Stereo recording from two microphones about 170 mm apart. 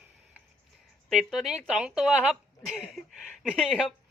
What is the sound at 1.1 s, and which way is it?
Speech, centre (ahead or behind).